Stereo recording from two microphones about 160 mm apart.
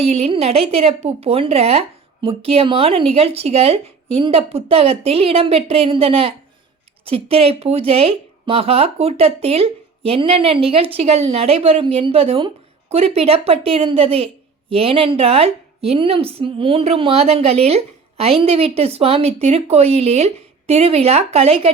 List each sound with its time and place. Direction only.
0.0 s a woman's voice: 40° right (ahead or behind)